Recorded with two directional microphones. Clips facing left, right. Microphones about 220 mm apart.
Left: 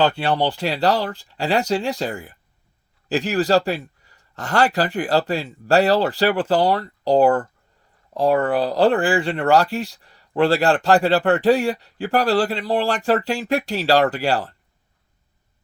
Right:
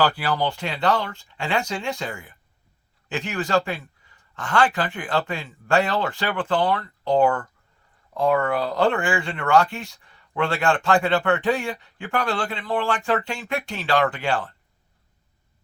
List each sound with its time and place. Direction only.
0.0 s speech: 25° left (ahead or behind)